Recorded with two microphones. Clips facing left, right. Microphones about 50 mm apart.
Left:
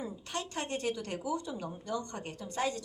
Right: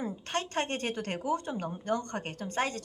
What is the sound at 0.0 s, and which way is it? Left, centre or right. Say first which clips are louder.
Speech: right 5 dB; right.